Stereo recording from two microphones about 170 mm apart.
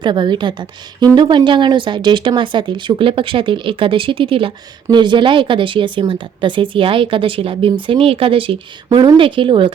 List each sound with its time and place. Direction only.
0.0 s a woman's voice: 25° right (ahead or behind)